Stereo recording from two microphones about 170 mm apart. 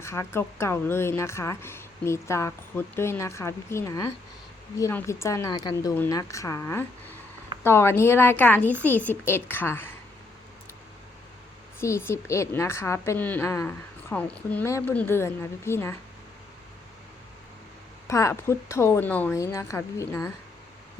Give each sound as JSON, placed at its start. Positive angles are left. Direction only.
{"t": 0.0, "sound": "a woman's voice", "side_deg": 15}
{"t": 11.8, "sound": "a woman's voice", "side_deg": 15}
{"t": 18.1, "sound": "a woman's voice", "side_deg": 20}